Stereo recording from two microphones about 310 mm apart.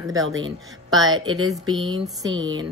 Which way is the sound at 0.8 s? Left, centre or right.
Centre.